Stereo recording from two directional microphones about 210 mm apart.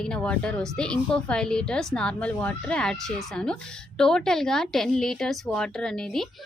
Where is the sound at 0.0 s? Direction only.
5° left (ahead or behind).